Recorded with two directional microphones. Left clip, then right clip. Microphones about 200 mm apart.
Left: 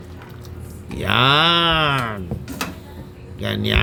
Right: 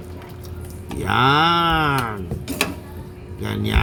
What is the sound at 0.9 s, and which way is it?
Speech, 15° left (ahead or behind).